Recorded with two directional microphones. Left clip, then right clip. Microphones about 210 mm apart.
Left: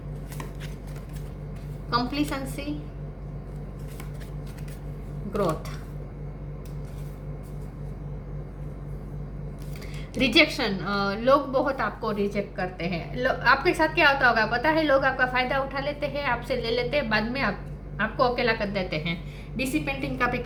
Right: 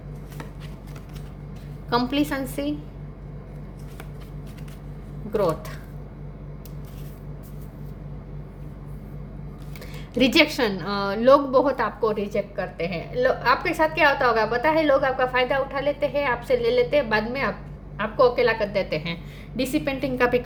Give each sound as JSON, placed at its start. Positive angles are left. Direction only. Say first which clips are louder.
{"t": 1.9, "sound": "a woman's voice", "louder": "right 3 dB", "side_deg": -50}
{"t": 5.4, "sound": "a woman's voice", "louder": "right 3 dB", "side_deg": -50}
{"t": 10.2, "sound": "a woman's voice", "louder": "right 2 dB", "side_deg": -50}